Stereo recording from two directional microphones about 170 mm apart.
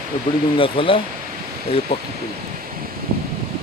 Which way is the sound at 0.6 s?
30° left (ahead or behind).